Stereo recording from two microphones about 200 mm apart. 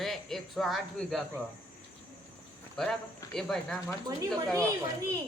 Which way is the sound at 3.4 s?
5° left (ahead or behind).